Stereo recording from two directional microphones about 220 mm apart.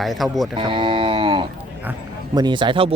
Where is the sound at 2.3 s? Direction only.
20° right (ahead or behind).